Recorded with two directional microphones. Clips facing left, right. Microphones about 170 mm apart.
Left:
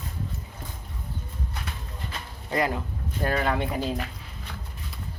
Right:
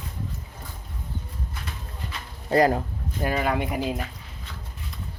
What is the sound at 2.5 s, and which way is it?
Speech, 40° right (ahead or behind).